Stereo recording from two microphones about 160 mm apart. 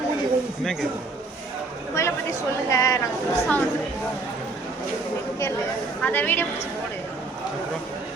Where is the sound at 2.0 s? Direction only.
20° left (ahead or behind).